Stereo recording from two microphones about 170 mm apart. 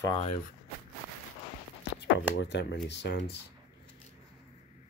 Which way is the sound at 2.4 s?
90° left.